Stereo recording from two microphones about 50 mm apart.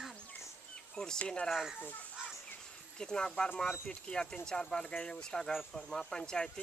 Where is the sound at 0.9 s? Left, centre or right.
Centre.